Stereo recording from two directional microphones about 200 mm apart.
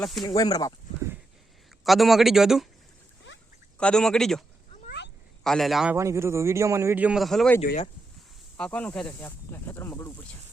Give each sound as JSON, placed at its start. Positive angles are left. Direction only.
{"t": 0.0, "sound": "a man's voice", "side_deg": 0}
{"t": 0.3, "sound": "speech", "side_deg": 20}
{"t": 1.8, "sound": "a man's voice", "side_deg": 0}
{"t": 3.8, "sound": "a man's voice", "side_deg": 5}
{"t": 6.0, "sound": "speech", "side_deg": -15}